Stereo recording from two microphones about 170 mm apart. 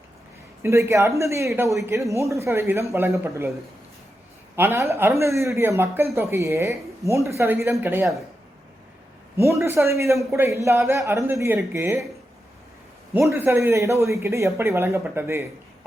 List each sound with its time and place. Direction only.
0.6 s a man's voice: 15° right (ahead or behind)
4.5 s a man's voice: 15° right (ahead or behind)
9.5 s a man's voice: 15° right (ahead or behind)
13.3 s a man's voice: 15° right (ahead or behind)